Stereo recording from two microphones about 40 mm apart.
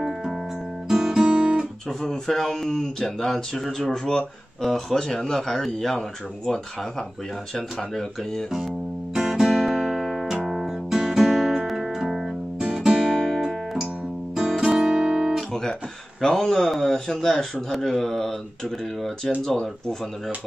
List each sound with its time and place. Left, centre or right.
0.8 s guitar: centre
2.0 s speech: centre
9.1 s music: centre
14.8 s guitar: right
16.2 s a sound: centre
16.7 s speech: centre
19.4 s speech: centre